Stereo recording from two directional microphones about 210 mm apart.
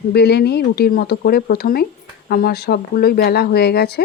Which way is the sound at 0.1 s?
50° left (ahead or behind).